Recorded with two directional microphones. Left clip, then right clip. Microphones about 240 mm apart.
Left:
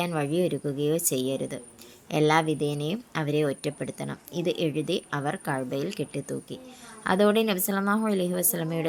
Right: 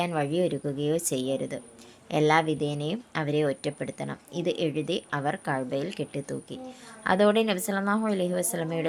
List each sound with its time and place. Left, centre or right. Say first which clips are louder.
0.0 s a woman's voice: even; centre